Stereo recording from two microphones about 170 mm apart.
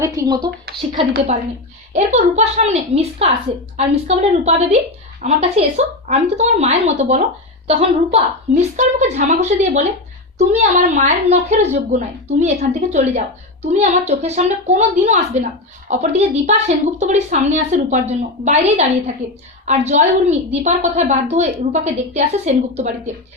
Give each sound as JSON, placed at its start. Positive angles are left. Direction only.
{"t": 0.0, "sound": "speech", "side_deg": -20}
{"t": 1.9, "sound": "a woman's voice", "side_deg": -40}